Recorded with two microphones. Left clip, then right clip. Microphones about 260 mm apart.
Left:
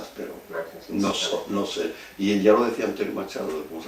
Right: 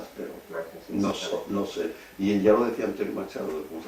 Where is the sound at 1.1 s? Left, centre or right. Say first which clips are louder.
Left 4 dB; centre.